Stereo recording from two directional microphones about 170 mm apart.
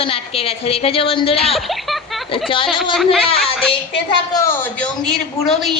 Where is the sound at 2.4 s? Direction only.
30° left (ahead or behind).